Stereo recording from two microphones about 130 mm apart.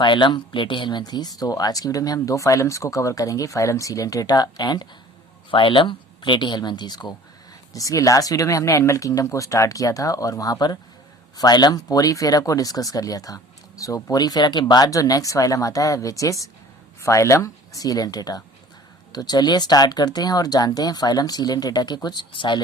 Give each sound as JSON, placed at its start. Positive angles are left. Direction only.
{"t": 0.0, "sound": "speech", "side_deg": 35}